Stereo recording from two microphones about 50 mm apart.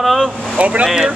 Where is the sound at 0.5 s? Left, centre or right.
Right.